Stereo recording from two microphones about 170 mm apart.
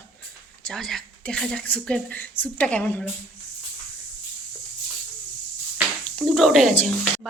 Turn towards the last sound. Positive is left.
turn(degrees=5)  # may be behind; listen again after turning